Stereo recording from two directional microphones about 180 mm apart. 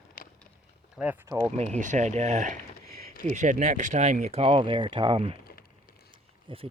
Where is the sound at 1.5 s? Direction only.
40° right (ahead or behind).